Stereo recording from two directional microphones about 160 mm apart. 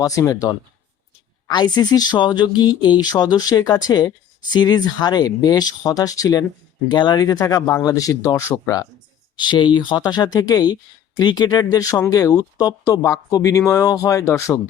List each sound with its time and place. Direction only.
0.0 s speech: 20° left (ahead or behind)
1.5 s speech: 25° left (ahead or behind)